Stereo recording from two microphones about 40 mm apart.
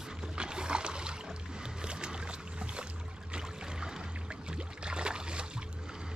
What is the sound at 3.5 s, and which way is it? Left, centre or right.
Music, centre.